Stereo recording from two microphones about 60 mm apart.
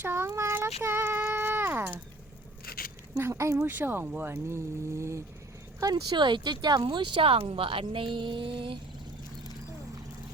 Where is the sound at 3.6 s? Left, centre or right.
Right.